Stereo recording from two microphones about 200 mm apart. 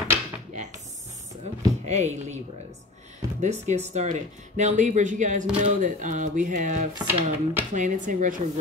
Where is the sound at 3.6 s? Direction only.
35° right (ahead or behind).